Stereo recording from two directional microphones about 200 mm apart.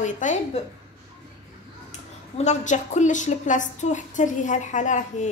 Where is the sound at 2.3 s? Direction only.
35° left (ahead or behind).